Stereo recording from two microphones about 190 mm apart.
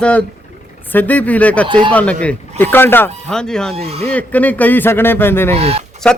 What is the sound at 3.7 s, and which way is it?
Speech, 30° right (ahead or behind).